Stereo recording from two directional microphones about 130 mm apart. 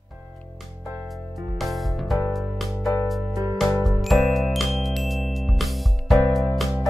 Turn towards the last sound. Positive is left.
turn(degrees=0)  # may be behind; listen again after turning